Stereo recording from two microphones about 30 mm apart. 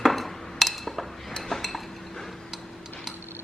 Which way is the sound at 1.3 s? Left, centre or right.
Centre.